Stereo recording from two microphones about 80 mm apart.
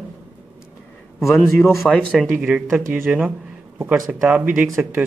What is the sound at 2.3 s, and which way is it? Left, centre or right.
Speech, centre.